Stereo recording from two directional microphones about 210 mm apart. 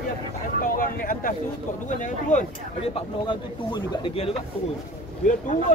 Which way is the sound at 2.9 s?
25° left (ahead or behind).